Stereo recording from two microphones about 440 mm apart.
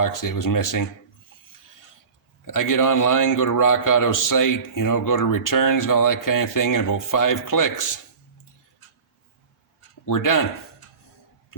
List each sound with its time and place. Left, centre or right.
0.0 s a man's voice: left
2.4 s a man's voice: left
10.1 s a man's voice: left